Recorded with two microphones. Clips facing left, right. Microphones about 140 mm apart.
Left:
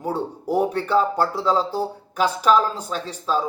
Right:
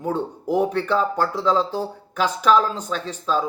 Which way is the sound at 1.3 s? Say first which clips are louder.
Right 1 dB; 10° left (ahead or behind).